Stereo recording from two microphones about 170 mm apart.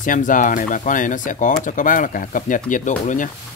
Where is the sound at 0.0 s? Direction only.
50° left (ahead or behind).